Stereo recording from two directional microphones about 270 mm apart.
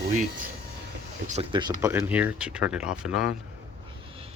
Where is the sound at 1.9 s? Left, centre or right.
Centre.